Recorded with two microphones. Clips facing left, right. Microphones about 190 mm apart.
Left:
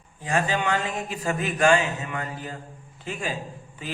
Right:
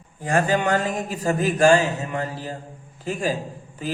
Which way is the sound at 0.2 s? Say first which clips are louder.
Right 4 dB; 45° right (ahead or behind).